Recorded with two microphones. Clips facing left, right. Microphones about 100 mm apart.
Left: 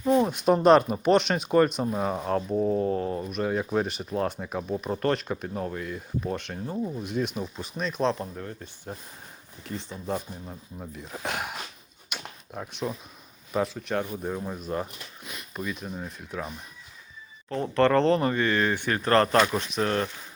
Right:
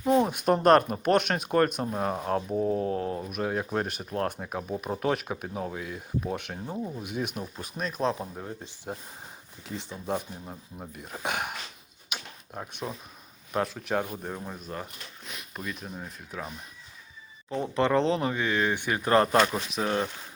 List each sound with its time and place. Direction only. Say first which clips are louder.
0.0 s speech: left 1 dB; 10° right (ahead or behind)
8.4 s speech: left 1 dB; 15° right (ahead or behind)
9.6 s speech: left 1 dB; 15° right (ahead or behind)
10.9 s speech: right 1 dB; 5° right (ahead or behind)
12.1 s a sound: left 1 dB; centre (ahead or behind)
13.5 s speech: left 1 dB; 5° right (ahead or behind)
17.5 s speech: left 3 dB; 10° right (ahead or behind)
19.4 s speech: left 2 dB; centre (ahead or behind)